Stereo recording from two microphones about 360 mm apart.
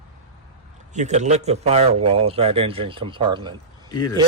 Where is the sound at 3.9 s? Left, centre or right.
Centre.